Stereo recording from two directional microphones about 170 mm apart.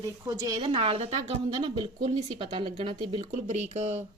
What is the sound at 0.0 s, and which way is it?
Speech, 20° right (ahead or behind).